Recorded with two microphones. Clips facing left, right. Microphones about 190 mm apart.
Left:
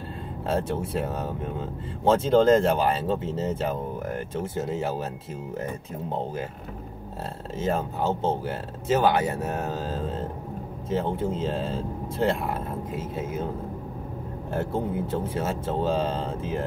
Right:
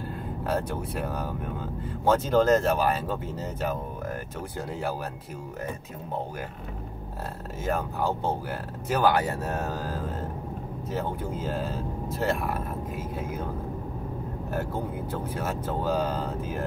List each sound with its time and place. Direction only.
0.5 s speech: 25° left (ahead or behind)
7.6 s speech: 25° left (ahead or behind)
14.5 s speech: 25° left (ahead or behind)